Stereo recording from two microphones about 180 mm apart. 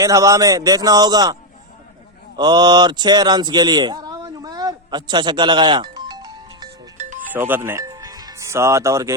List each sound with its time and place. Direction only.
0.0 s a man's voice: 20° right (ahead or behind)
7.3 s speech: 10° right (ahead or behind)